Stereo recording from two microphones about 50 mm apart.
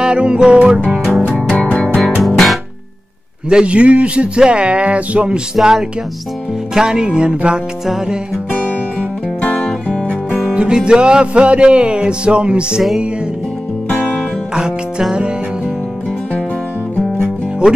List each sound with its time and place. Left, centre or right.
0.0 s music: centre
2.2 s music: centre
3.4 s music: centre
5.6 s music: centre
7.8 s music: centre
9.4 s music: left
10.4 s music: centre
14.5 s music: centre